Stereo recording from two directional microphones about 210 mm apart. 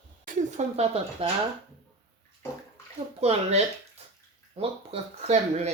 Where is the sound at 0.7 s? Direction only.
30° right (ahead or behind).